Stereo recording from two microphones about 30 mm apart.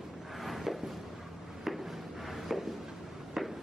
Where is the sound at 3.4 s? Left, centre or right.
Centre.